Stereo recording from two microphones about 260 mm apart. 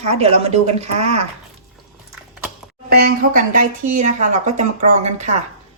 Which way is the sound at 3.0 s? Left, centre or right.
Right.